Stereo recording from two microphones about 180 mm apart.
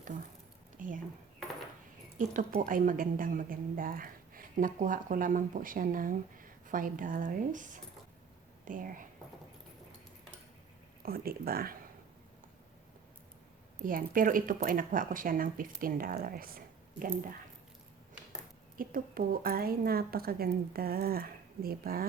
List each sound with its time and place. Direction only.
0.8 s speech: 45° right (ahead or behind)
2.1 s a woman's voice: 50° right (ahead or behind)
11.0 s a woman's voice: 55° right (ahead or behind)
13.8 s a woman's voice: 50° right (ahead or behind)
18.8 s a woman's voice: 50° right (ahead or behind)